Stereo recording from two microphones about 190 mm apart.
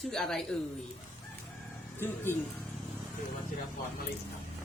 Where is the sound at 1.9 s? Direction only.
10° left (ahead or behind).